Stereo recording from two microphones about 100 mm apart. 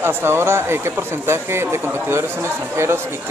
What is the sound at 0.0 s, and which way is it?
Speech, 25° right (ahead or behind).